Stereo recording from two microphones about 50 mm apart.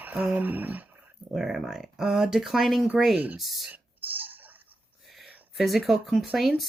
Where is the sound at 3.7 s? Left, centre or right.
Right.